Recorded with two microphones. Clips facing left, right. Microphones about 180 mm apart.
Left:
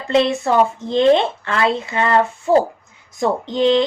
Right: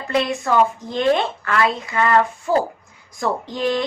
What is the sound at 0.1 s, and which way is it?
A woman's voice, 25° left (ahead or behind).